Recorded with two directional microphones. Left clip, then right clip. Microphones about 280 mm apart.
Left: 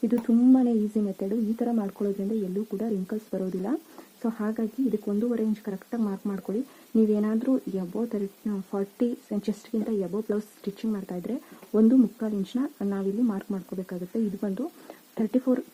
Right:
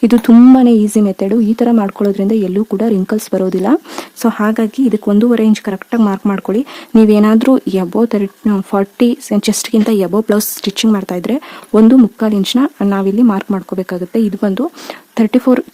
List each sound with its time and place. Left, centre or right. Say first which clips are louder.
0.1 s speech: right 14 dB; right